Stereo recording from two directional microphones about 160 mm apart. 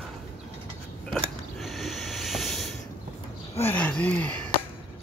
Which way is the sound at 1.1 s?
Centre (ahead or behind).